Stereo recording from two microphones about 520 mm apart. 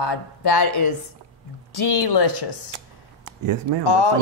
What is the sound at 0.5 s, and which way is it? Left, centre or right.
A woman's voice, left.